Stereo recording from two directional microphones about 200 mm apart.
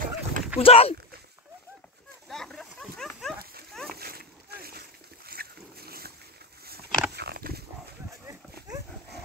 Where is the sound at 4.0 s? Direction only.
50° right (ahead or behind).